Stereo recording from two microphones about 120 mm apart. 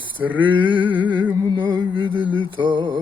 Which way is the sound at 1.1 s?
40° right (ahead or behind).